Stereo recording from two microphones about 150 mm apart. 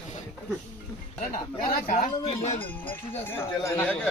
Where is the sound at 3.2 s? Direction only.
15° left (ahead or behind).